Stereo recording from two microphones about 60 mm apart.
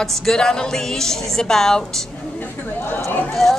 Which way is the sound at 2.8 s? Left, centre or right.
Left.